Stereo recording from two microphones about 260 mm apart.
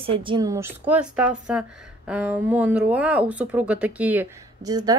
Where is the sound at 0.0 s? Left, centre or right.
Centre.